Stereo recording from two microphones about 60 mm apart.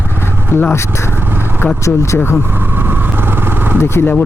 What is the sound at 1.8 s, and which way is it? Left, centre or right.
Speech, left.